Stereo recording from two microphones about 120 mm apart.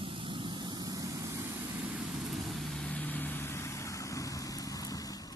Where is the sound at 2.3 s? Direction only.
10° left (ahead or behind); by 5.0 s 30° left (ahead or behind).